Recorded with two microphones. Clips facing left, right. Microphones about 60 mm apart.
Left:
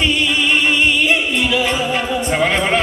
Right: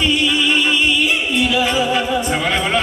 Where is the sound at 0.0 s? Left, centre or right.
Left.